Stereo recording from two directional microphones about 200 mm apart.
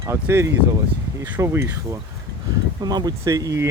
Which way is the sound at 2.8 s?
20° right (ahead or behind).